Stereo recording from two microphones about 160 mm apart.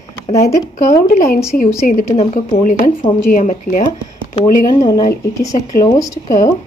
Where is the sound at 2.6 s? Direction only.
55° left (ahead or behind).